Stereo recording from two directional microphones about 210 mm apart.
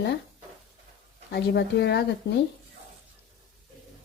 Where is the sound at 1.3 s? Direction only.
50° left (ahead or behind).